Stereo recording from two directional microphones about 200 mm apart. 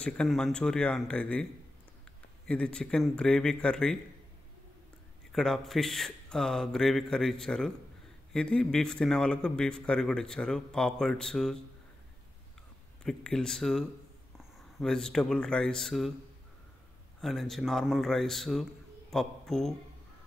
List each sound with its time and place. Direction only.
0.0 s a man's voice: 5° left (ahead or behind)
5.3 s a man's voice: centre (ahead or behind)
13.0 s a man's voice: 5° left (ahead or behind)
17.2 s a man's voice: centre (ahead or behind)